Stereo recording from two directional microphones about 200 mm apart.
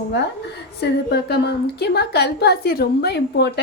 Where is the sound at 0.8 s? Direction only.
55° left (ahead or behind).